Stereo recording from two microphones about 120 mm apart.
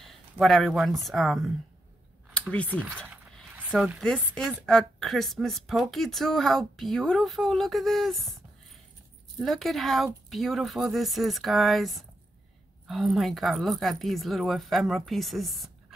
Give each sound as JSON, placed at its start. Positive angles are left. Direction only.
{"t": 0.0, "sound": "a sound", "side_deg": 0}
{"t": 1.0, "sound": "a woman's voice", "side_deg": 0}
{"t": 3.7, "sound": "a woman's voice", "side_deg": -5}
{"t": 4.0, "sound": "a woman's voice", "side_deg": 5}
{"t": 9.4, "sound": "a woman's voice", "side_deg": 0}